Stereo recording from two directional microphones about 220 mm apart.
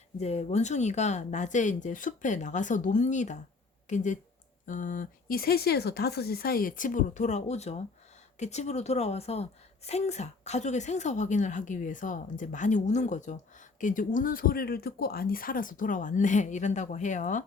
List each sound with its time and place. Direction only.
0.2 s a woman's voice: 30° left (ahead or behind)